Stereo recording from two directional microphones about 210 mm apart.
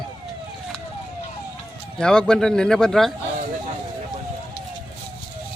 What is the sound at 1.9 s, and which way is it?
Speech, 5° left (ahead or behind).